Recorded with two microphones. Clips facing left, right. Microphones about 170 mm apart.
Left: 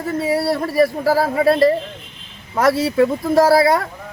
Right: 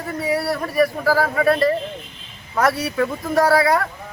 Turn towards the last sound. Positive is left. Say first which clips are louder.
# left 3 dB
turn(degrees=25)  # may be behind; listen again after turning